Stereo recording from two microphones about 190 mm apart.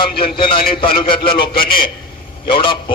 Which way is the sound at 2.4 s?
25° left (ahead or behind).